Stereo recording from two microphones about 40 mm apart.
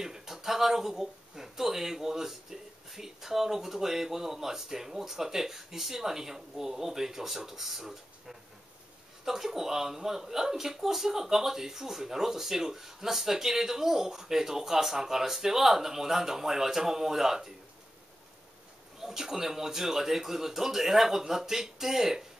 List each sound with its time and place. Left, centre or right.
0.0 s speech: centre
18.9 s speech: centre